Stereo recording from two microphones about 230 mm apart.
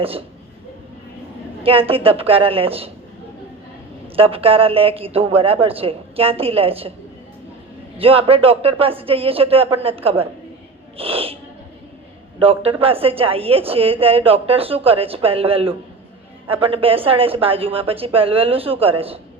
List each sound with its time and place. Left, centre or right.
1.6 s a woman's voice: right
4.1 s a woman's voice: right
7.9 s a woman's voice: right
12.4 s a woman's voice: right